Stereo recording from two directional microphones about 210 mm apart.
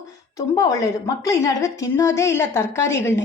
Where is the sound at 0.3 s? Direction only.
15° left (ahead or behind).